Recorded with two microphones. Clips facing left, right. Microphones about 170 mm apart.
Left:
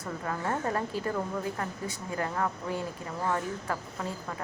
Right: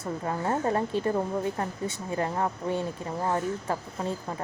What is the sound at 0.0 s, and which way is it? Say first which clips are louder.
Speech: right 3 dB; 25° right (ahead or behind).